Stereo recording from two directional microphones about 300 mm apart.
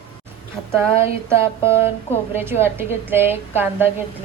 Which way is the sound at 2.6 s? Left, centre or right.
Centre.